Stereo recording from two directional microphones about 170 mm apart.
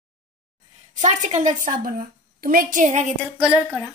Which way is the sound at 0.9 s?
45° right (ahead or behind).